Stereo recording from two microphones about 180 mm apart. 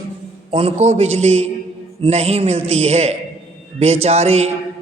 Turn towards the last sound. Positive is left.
turn(degrees=-35)  # may be behind; listen again after turning